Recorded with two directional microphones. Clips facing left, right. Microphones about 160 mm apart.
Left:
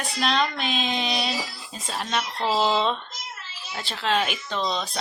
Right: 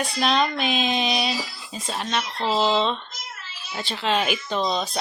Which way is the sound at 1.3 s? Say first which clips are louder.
Right 1 dB; centre (ahead or behind).